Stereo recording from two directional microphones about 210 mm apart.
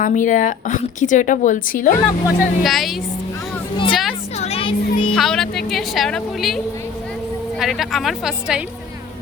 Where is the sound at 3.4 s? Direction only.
25° left (ahead or behind).